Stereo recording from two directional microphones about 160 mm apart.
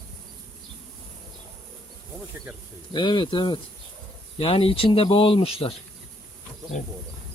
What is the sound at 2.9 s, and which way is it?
Speech, 30° left (ahead or behind).